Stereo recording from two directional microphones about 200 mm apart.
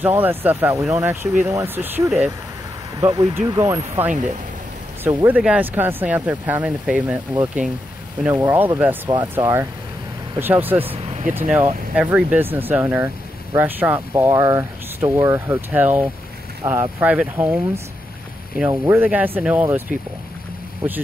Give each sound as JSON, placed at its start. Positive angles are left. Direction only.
{"t": 0.0, "sound": "speech", "side_deg": -10}
{"t": 3.0, "sound": "speech", "side_deg": -15}
{"t": 5.0, "sound": "speech", "side_deg": -10}